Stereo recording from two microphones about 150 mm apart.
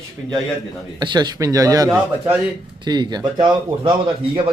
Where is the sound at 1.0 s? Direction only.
30° right (ahead or behind).